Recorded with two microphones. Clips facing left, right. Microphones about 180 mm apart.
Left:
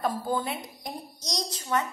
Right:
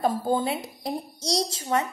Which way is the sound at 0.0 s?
25° right (ahead or behind).